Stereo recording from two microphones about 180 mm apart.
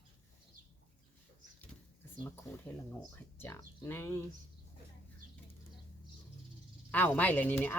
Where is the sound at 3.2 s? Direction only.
10° left (ahead or behind).